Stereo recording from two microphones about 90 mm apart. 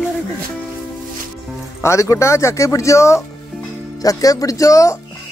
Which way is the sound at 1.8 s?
35° left (ahead or behind).